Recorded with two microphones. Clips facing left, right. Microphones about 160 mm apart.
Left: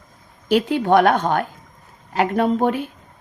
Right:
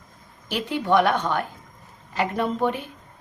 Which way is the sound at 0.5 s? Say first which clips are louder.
Left 5 dB; 55° left (ahead or behind).